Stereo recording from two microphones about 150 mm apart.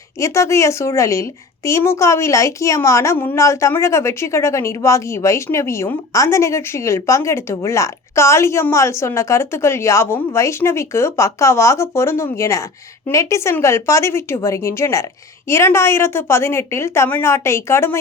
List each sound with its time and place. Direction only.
0.2 s a woman's voice: 20° left (ahead or behind)